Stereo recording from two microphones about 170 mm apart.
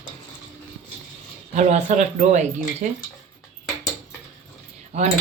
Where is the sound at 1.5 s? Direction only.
45° right (ahead or behind).